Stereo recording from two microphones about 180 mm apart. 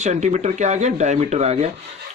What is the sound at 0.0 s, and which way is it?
Speech, 40° right (ahead or behind).